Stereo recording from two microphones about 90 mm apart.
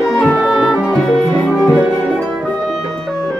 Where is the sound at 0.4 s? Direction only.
5° right (ahead or behind).